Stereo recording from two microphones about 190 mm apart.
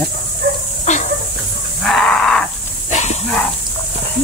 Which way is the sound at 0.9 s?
40° left (ahead or behind).